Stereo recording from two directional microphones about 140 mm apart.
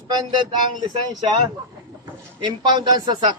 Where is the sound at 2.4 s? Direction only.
30° right (ahead or behind).